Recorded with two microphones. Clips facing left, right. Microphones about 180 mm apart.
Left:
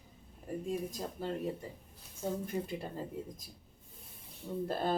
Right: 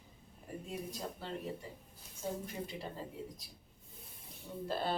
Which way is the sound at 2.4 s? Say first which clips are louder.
Left 5 dB; 50° left (ahead or behind).